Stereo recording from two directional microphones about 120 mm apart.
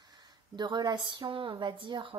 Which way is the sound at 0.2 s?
35° right (ahead or behind).